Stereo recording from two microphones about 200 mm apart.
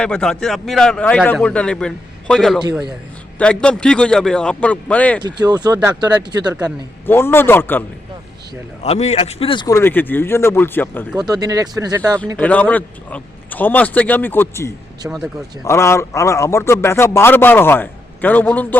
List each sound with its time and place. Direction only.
0.0 s a man's voice: 5° left (ahead or behind)
5.2 s speech: 20° right (ahead or behind)
7.1 s a man's voice: 10° left (ahead or behind)
8.8 s a man's voice: 35° left (ahead or behind); by 11.0 s 10° left (ahead or behind)
11.2 s speech: 20° right (ahead or behind)
12.4 s a man's voice: 5° left (ahead or behind)
15.0 s speech: 10° right (ahead or behind)
15.6 s a man's voice: 15° left (ahead or behind)